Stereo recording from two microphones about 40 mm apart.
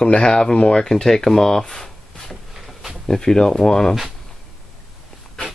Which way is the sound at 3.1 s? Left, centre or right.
Centre.